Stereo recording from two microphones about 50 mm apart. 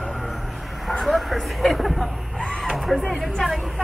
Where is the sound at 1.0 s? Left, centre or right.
Centre.